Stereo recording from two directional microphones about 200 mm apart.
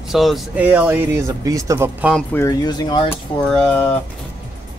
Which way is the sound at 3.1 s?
10° left (ahead or behind).